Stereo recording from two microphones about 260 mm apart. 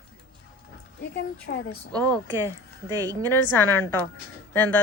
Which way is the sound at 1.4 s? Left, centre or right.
Left.